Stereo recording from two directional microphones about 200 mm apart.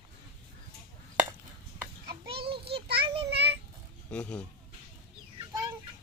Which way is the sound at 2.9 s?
25° right (ahead or behind).